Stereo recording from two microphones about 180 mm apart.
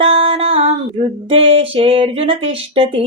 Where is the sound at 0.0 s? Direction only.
35° right (ahead or behind).